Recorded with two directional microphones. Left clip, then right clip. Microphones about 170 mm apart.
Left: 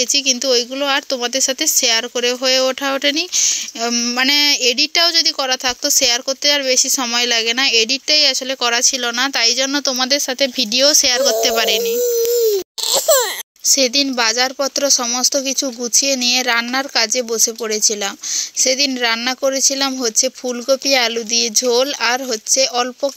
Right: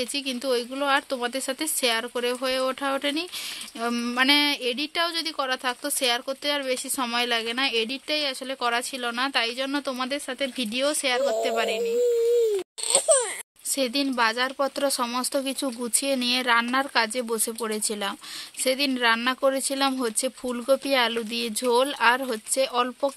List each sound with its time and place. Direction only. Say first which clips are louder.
0.0 s speech: left 12 dB; 20° left (ahead or behind); by 12.0 s 35° left (ahead or behind)
12.8 s babbling: left 8 dB; 50° left (ahead or behind)
13.7 s speech: left 7 dB; 20° left (ahead or behind)